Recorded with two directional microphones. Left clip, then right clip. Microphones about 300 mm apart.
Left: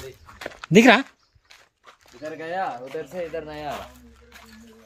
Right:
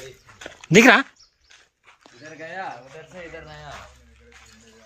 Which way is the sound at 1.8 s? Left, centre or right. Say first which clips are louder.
Left 8 dB; left.